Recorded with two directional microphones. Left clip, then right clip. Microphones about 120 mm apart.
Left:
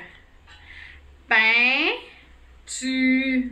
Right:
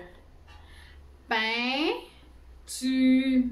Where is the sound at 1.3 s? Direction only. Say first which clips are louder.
Left 10 dB; 45° right (ahead or behind).